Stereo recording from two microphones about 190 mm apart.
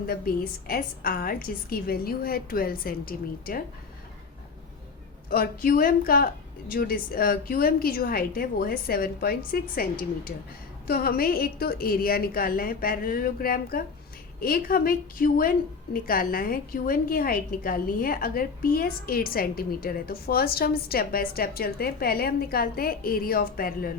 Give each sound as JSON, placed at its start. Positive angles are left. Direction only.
{"t": 0.1, "sound": "a woman's voice", "side_deg": 50}
{"t": 5.3, "sound": "a woman's voice", "side_deg": 50}